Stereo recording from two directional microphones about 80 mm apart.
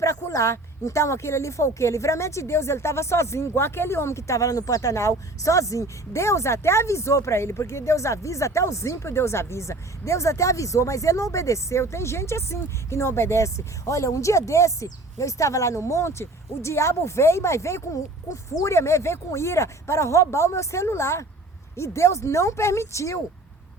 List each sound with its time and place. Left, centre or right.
0.0 s speech: left